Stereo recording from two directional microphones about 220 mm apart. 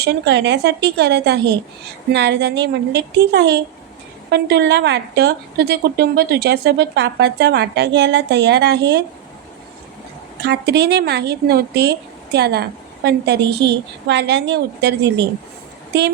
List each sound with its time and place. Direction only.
0.0 s a woman's voice: 50° right (ahead or behind)
10.4 s a woman's voice: 50° right (ahead or behind)